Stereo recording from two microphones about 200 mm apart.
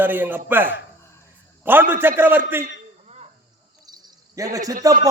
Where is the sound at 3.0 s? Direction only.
35° right (ahead or behind).